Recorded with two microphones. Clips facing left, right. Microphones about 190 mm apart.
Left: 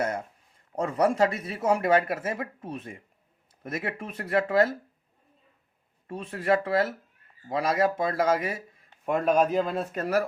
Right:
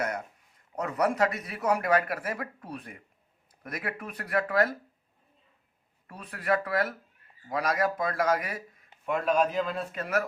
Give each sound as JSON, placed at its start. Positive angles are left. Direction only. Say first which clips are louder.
{"t": 0.8, "sound": "speech", "louder": "left 3 dB", "side_deg": 30}
{"t": 6.1, "sound": "speech", "louder": "left 4 dB", "side_deg": 25}
{"t": 9.0, "sound": "speech", "louder": "left 3 dB", "side_deg": 40}